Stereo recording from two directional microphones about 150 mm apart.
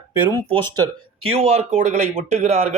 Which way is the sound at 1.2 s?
40° right (ahead or behind).